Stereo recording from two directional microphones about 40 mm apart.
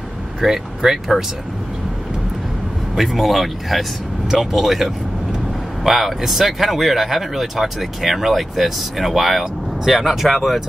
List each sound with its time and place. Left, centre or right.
0.4 s speech: centre
3.0 s speech: centre